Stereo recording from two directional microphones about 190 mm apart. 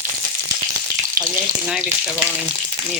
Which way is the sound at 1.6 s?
Centre (ahead or behind).